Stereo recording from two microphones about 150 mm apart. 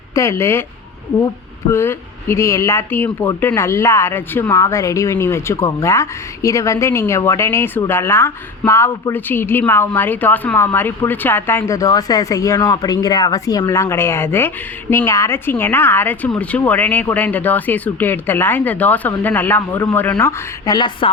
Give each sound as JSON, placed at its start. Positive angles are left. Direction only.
{"t": 0.1, "sound": "speech", "side_deg": 20}
{"t": 1.7, "sound": "speech", "side_deg": 15}
{"t": 20.7, "sound": "a woman's voice", "side_deg": 30}